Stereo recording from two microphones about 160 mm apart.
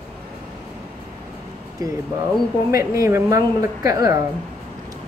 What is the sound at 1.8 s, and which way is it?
A woman's voice, 25° right (ahead or behind).